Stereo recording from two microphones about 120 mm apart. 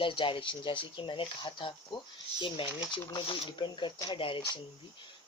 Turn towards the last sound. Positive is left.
turn(degrees=45)  # may be behind; listen again after turning